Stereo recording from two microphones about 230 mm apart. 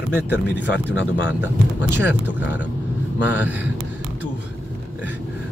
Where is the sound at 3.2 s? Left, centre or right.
Left.